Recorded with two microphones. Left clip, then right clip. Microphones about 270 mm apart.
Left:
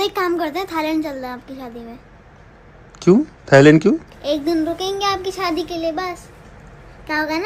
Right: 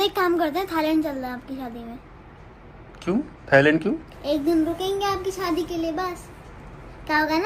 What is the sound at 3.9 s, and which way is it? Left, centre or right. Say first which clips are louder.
Speech: left 9 dB; right.